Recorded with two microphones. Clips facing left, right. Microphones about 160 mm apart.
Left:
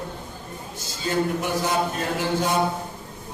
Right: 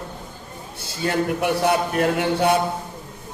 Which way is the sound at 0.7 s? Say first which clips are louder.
Right 2 dB; 60° right (ahead or behind).